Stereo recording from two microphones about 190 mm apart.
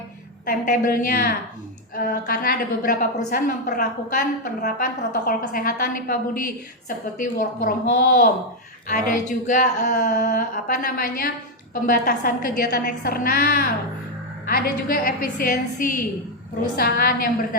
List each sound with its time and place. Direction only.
0.4 s a woman's voice: 45° left (ahead or behind)